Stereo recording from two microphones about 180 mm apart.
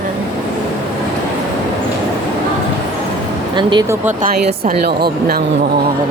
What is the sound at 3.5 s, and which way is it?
Speech, 25° right (ahead or behind).